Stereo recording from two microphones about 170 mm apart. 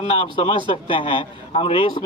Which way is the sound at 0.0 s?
30° left (ahead or behind).